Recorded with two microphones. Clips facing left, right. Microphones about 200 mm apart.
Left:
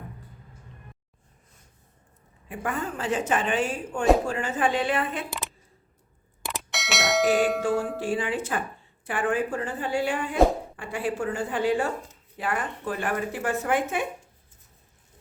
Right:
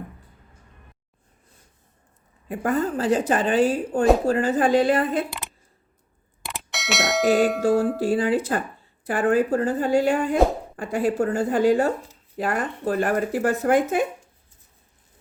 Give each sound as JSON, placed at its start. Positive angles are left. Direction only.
{"t": 2.5, "sound": "speech", "side_deg": -35}
{"t": 6.4, "sound": "doorbell", "side_deg": 0}
{"t": 7.6, "sound": "speech", "side_deg": -40}